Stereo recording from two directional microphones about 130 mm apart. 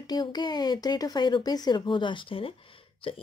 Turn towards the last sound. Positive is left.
turn(degrees=45)  # may be behind; listen again after turning